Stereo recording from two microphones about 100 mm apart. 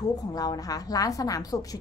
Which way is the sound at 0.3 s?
40° left (ahead or behind).